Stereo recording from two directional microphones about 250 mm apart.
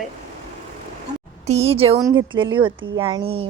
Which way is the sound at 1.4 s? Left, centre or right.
Right.